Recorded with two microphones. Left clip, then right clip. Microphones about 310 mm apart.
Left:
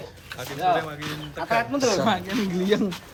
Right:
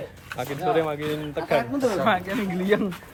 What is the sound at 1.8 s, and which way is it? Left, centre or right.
Speech, centre.